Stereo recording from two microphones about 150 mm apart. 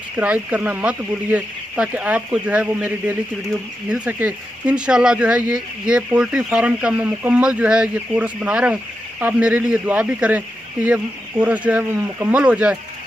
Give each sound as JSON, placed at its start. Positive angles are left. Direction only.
{"t": 0.2, "sound": "speech", "side_deg": -10}